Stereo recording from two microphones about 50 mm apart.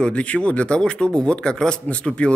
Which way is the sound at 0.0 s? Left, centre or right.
Left.